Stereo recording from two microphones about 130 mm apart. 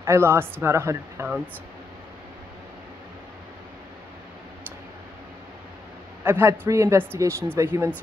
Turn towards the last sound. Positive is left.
turn(degrees=-20)  # may be behind; listen again after turning